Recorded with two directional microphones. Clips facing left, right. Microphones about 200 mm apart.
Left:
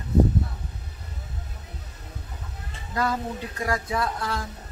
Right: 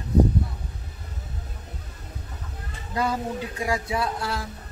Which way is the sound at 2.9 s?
15° right (ahead or behind).